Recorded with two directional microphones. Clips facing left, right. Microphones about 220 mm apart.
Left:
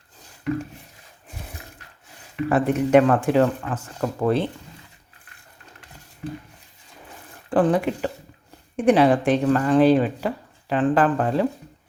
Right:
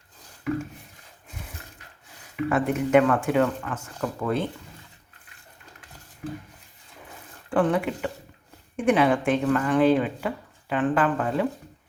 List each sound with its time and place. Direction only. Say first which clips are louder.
2.5 s speech: left 3 dB; 35° left (ahead or behind)
7.5 s speech: left 3 dB; 35° left (ahead or behind)